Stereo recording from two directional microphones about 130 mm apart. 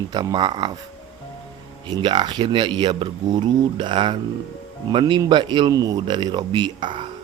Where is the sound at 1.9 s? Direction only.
35° right (ahead or behind).